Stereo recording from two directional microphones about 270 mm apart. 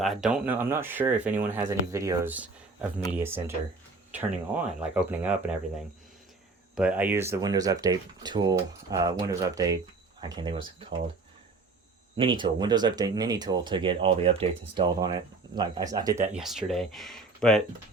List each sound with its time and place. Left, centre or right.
0.0 s speech: centre
4.8 s speech: centre
6.7 s speech: centre
12.1 s speech: centre
16.2 s speech: centre